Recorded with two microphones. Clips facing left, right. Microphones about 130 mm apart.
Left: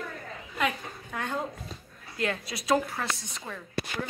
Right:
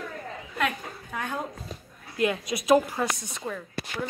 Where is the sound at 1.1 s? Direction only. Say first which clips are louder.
Even; 10° right (ahead or behind).